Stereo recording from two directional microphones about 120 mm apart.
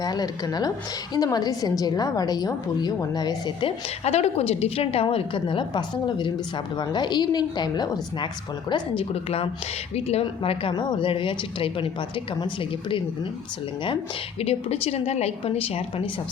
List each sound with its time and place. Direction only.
0.0 s a woman's voice: 35° left (ahead or behind)
4.0 s a woman's voice: 65° left (ahead or behind)
5.0 s a woman's voice: 45° left (ahead or behind)
8.7 s speech: 50° left (ahead or behind)
14.4 s a woman's voice: 60° left (ahead or behind)